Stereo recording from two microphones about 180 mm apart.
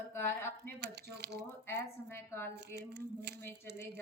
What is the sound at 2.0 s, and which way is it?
Speech, 15° left (ahead or behind).